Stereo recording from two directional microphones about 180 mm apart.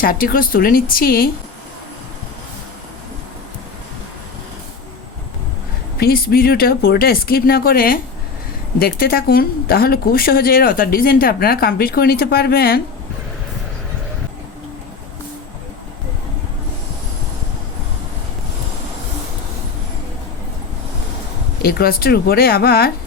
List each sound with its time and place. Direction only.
0.0 s speech: 55° left (ahead or behind)
6.0 s speech: 55° left (ahead or behind)
21.6 s speech: 55° left (ahead or behind)